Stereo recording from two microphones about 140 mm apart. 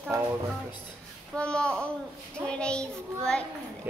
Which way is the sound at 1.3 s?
5° left (ahead or behind).